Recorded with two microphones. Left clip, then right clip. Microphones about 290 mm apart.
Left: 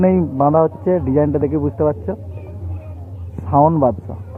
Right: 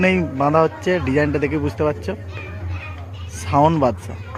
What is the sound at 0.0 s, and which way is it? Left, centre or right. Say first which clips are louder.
Speech: left 3 dB; centre.